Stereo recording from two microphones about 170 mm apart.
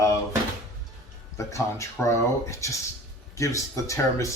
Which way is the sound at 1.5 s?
15° left (ahead or behind).